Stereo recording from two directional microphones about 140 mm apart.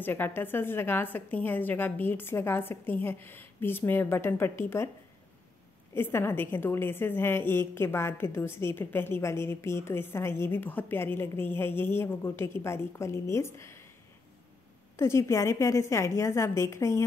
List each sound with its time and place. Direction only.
0.0 s a woman's voice: 15° left (ahead or behind)
5.9 s a woman's voice: 15° left (ahead or behind)
15.0 s a woman's voice: 20° left (ahead or behind)